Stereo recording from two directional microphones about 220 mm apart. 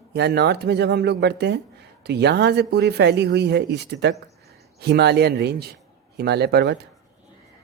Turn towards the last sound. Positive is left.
turn(degrees=-50)  # may be behind; listen again after turning